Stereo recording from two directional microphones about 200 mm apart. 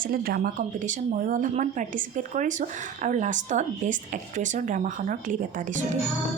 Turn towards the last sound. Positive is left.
turn(degrees=-40)  # may be behind; listen again after turning